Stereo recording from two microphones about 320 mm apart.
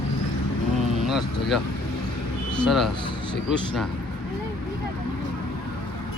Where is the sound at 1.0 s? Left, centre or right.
Centre.